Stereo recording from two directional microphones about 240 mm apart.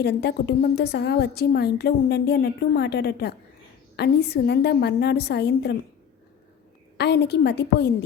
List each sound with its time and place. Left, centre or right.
0.0 s a woman's voice: left
6.9 s a woman's voice: left